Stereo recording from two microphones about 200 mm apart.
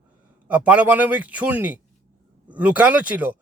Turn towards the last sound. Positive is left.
turn(degrees=-5)  # may be behind; listen again after turning